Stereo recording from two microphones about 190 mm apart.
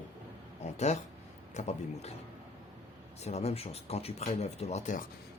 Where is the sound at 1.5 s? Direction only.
35° left (ahead or behind).